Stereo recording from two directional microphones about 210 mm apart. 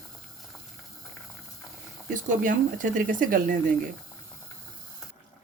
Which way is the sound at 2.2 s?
40° right (ahead or behind).